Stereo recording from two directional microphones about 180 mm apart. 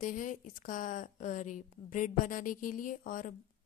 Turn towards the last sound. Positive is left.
turn(degrees=50)  # may be behind; listen again after turning